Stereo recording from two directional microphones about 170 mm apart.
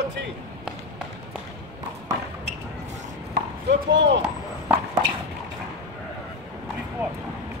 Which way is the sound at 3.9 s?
90° right.